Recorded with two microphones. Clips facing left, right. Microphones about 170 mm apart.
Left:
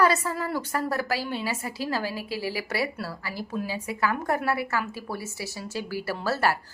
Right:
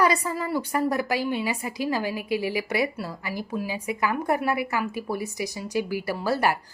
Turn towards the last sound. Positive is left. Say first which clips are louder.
# right 2 dB
turn(degrees=-15)  # may be behind; listen again after turning